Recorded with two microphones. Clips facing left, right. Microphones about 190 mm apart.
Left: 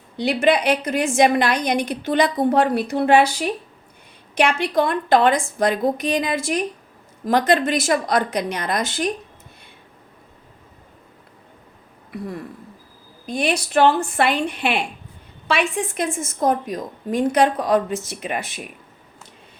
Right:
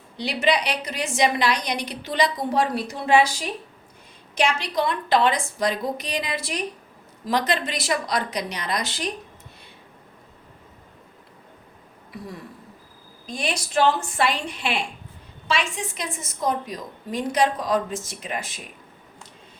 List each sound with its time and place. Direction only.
0.2 s a woman's voice: 50° left (ahead or behind)
13.2 s a woman's voice: 60° left (ahead or behind)